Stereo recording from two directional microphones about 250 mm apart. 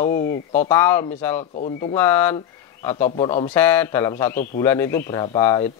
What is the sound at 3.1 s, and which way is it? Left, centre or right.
Speech, left.